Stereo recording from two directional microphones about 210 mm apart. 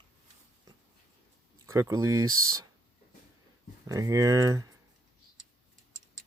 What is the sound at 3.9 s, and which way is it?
Speech, 15° right (ahead or behind).